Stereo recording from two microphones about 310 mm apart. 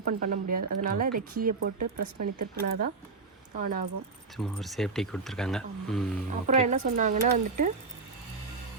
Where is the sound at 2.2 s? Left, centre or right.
Right.